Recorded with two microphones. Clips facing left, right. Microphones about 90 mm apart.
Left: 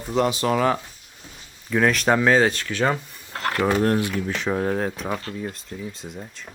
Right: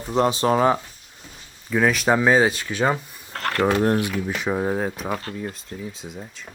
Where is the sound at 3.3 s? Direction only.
5° left (ahead or behind).